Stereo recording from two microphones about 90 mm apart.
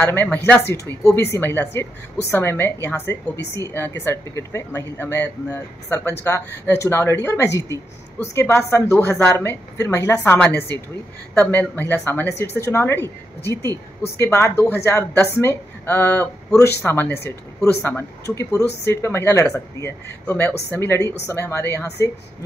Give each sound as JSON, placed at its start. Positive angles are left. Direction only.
{"t": 0.0, "sound": "a woman's voice", "side_deg": 25}